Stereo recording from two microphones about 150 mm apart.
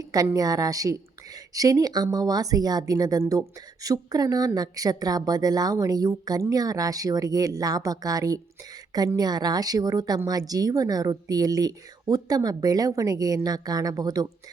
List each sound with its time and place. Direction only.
0.1 s a woman's voice: 25° right (ahead or behind)